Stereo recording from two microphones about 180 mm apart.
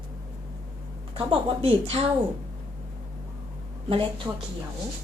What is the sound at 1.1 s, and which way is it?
Speech, 30° right (ahead or behind).